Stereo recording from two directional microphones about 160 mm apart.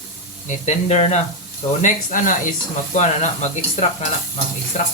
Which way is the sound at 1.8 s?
50° left (ahead or behind).